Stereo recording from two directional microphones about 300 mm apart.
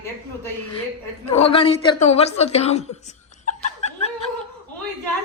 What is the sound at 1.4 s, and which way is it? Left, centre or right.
A woman's voice, centre.